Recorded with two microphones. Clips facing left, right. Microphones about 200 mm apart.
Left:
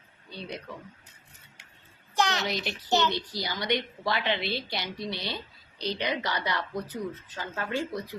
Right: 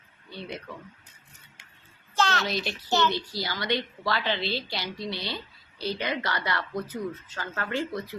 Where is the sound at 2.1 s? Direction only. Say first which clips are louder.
Right 1 dB; 15° left (ahead or behind).